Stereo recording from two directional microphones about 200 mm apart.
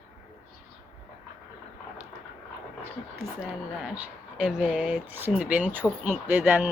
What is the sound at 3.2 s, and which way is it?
A woman's voice, 5° right (ahead or behind).